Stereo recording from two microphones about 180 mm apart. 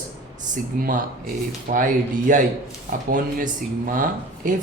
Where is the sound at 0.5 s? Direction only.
45° right (ahead or behind).